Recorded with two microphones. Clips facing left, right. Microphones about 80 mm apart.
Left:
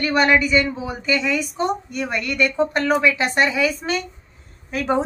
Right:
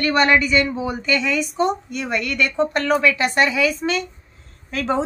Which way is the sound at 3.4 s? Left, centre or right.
Left.